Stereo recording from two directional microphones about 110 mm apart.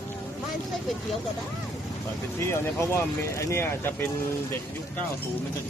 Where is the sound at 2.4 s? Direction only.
25° left (ahead or behind).